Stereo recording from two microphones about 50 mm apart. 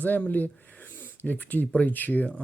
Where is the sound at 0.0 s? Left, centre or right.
Left.